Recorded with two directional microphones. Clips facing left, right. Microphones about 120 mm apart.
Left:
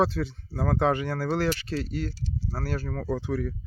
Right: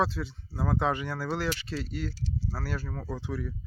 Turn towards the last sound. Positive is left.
turn(degrees=50)  # may be behind; listen again after turning